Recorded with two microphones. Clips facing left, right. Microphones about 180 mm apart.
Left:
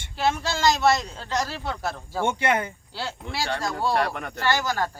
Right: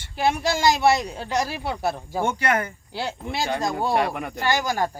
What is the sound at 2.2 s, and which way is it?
Speech, 25° left (ahead or behind).